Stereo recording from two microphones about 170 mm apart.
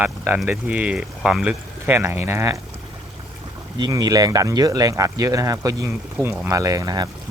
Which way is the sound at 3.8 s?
20° right (ahead or behind).